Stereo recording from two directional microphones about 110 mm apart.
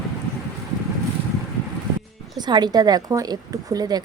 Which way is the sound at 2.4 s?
40° right (ahead or behind).